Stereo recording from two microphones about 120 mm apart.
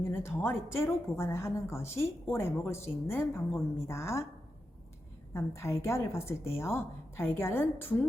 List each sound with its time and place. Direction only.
0.0 s speech: 20° left (ahead or behind)
5.3 s speech: 20° left (ahead or behind)